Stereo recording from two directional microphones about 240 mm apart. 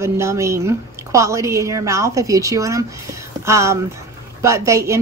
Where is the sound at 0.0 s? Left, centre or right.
Centre.